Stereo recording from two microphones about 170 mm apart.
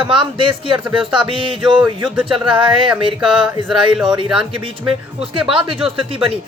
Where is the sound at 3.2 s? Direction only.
5° right (ahead or behind).